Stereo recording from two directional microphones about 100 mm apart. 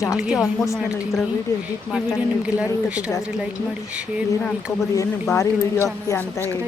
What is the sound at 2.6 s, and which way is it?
Speech, 10° right (ahead or behind).